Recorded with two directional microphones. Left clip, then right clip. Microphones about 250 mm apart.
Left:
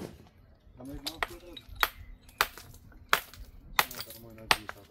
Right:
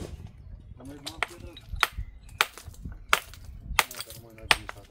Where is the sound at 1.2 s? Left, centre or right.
Centre.